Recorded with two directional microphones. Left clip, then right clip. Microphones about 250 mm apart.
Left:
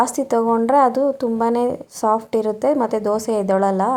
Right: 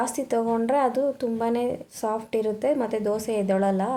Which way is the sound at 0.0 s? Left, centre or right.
Centre.